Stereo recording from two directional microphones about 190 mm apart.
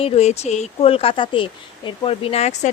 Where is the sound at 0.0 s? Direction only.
35° left (ahead or behind).